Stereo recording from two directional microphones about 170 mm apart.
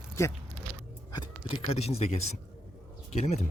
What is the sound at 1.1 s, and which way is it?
Speech, 30° left (ahead or behind).